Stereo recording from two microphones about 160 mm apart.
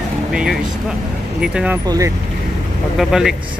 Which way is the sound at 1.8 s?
20° right (ahead or behind).